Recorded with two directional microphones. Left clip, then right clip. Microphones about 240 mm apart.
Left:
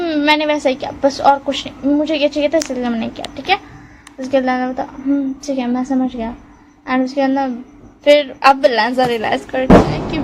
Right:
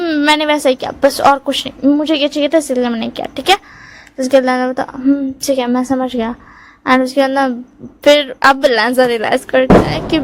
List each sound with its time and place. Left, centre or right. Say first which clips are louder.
0.0 s a woman's voice: right 2 dB; right